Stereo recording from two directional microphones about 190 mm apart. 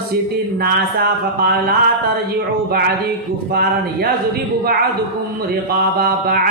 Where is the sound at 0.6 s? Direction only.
55° right (ahead or behind).